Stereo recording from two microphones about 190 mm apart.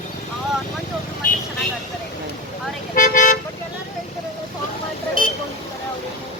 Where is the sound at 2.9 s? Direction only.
45° left (ahead or behind).